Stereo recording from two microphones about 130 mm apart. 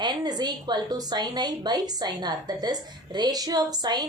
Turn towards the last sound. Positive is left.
turn(degrees=-30)  # may be behind; listen again after turning